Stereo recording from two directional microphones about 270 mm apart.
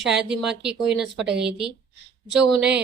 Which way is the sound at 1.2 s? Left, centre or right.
Right.